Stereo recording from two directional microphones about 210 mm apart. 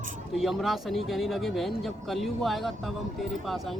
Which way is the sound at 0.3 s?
Centre (ahead or behind).